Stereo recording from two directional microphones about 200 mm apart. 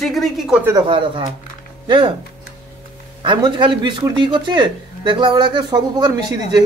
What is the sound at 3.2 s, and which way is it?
A man's voice, 25° right (ahead or behind).